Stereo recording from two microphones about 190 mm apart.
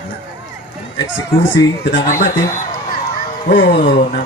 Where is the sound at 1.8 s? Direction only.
45° left (ahead or behind).